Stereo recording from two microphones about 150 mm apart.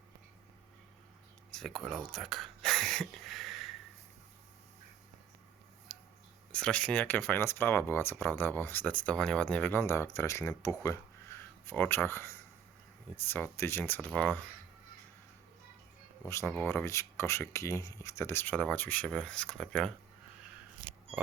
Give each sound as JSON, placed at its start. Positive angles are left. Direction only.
{"t": 1.5, "sound": "speech", "side_deg": 0}
{"t": 5.9, "sound": "a sound", "side_deg": 0}
{"t": 6.5, "sound": "speech", "side_deg": 5}
{"t": 16.2, "sound": "speech", "side_deg": 15}